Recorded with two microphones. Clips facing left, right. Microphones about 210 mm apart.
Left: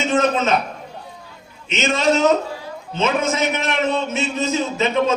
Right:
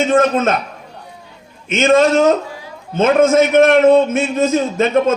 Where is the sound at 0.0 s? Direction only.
50° right (ahead or behind).